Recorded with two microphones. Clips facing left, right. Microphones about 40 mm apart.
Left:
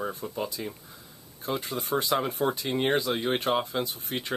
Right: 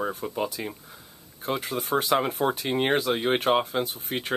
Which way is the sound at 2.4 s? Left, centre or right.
Right.